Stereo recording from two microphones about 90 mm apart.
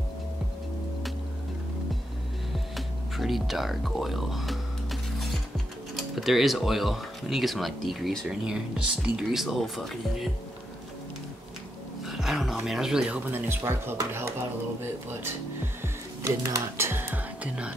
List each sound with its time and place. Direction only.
2.7 s speech: centre (ahead or behind)
8.5 s speech: 10° right (ahead or behind)
12.0 s music: 5° right (ahead or behind)
12.6 s speech: 5° right (ahead or behind)
13.3 s speech: 25° right (ahead or behind)
17.4 s speech: 15° right (ahead or behind)